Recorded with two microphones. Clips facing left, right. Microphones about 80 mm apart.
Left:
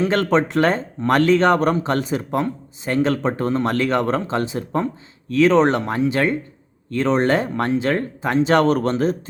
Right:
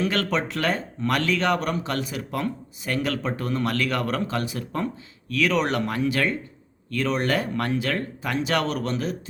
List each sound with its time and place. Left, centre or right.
0.0 s speech: left